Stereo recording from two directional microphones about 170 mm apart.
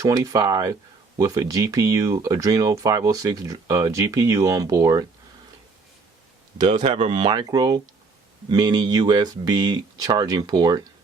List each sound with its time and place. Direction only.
0.0 s speech: 20° right (ahead or behind)
6.6 s speech: 30° right (ahead or behind)